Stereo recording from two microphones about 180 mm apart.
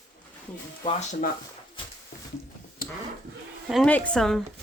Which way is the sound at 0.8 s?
40° left (ahead or behind).